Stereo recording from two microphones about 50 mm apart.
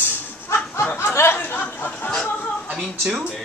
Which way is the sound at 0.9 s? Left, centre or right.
Left.